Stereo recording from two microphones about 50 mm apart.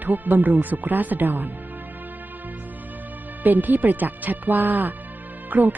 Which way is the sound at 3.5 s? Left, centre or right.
Right.